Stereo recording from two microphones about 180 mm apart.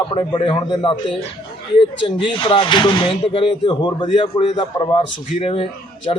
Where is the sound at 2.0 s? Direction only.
30° left (ahead or behind).